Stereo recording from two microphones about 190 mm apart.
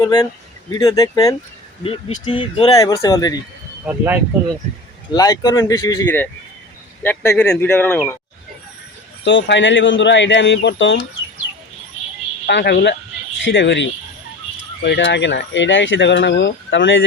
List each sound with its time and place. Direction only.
0.0 s speech: 20° left (ahead or behind)
1.8 s speech: 30° left (ahead or behind)
2.7 s speech: 15° left (ahead or behind)
3.8 s speech: 10° right (ahead or behind)
5.1 s speech: 20° left (ahead or behind)
9.2 s speech: 70° left (ahead or behind)
12.5 s speech: 65° left (ahead or behind)
14.8 s speech: 65° left (ahead or behind)